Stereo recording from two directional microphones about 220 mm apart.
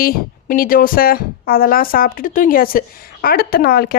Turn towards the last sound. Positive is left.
turn(degrees=45)  # may be behind; listen again after turning